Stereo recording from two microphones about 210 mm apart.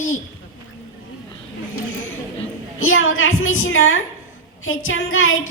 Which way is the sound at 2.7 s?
70° left (ahead or behind).